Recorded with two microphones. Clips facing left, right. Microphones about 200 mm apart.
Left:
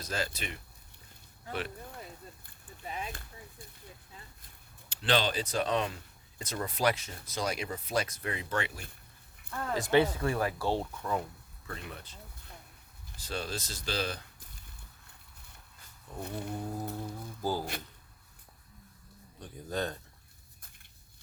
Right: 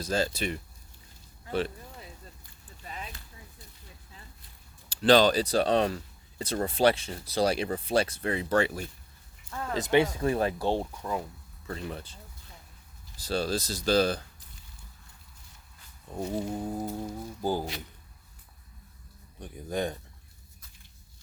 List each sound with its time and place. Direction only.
0.0 s speech: 30° right (ahead or behind)
4.9 s speech: 40° right (ahead or behind)
9.7 s speech: 20° right (ahead or behind)
11.7 s speech: 30° right (ahead or behind)
13.1 s speech: 35° right (ahead or behind)
16.2 s speech: 15° right (ahead or behind)
19.4 s speech: 15° right (ahead or behind)